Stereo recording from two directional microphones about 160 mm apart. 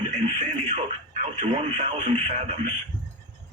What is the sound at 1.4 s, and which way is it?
Speech, 45° right (ahead or behind).